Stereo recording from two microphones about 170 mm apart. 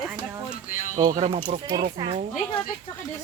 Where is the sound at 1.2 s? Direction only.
40° right (ahead or behind).